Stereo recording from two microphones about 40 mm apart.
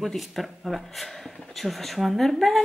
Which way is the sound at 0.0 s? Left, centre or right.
Centre.